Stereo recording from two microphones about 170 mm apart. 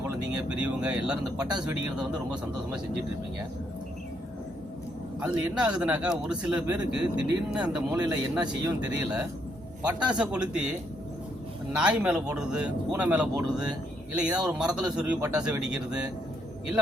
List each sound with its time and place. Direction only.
0.4 s a man's voice: 5° right (ahead or behind)
1.4 s speech: 25° right (ahead or behind)
5.2 s a man's voice: 5° right (ahead or behind)
11.7 s a man's voice: 5° right (ahead or behind)